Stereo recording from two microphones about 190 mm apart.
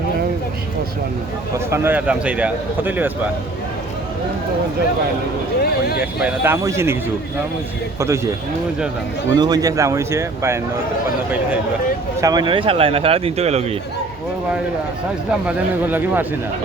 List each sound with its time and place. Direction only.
1.5 s a man's voice: 15° right (ahead or behind)
5.5 s speech: 55° left (ahead or behind)
6.0 s a man's voice: 10° right (ahead or behind)
7.9 s a man's voice: 15° right (ahead or behind)
9.3 s a man's voice: 20° right (ahead or behind)
12.2 s speech: 20° right (ahead or behind)
15.4 s a man's voice: 10° right (ahead or behind)